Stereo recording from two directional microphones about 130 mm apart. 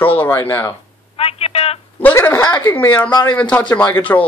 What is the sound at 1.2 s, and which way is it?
Telephone, 50° left (ahead or behind).